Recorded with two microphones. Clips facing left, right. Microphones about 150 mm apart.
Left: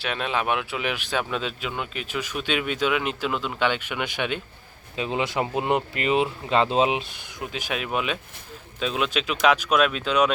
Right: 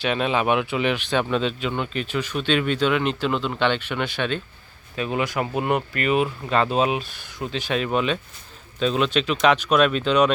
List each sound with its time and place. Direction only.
0.0 s speech: centre (ahead or behind)